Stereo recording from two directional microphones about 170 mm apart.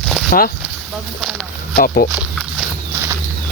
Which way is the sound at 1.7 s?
60° left (ahead or behind).